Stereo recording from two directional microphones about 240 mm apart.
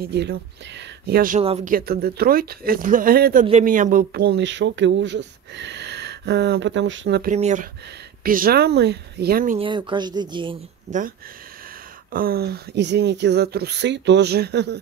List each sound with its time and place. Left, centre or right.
0.0 s speech: right
7.3 s a woman's voice: right
9.6 s a woman's voice: centre
12.1 s speech: right